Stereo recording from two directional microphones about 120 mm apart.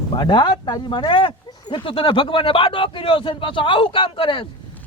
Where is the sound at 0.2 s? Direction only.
40° left (ahead or behind).